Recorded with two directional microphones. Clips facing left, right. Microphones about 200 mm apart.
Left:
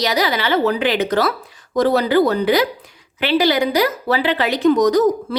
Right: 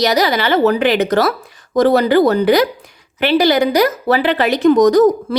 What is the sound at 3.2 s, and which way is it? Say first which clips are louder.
Speech: right 3 dB; 45° right (ahead or behind).